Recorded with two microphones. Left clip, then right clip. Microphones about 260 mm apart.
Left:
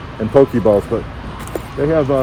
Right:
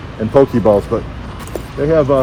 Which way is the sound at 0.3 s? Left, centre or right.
Centre.